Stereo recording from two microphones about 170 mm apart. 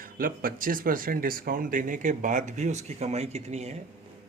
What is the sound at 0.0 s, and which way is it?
Speech, 55° right (ahead or behind).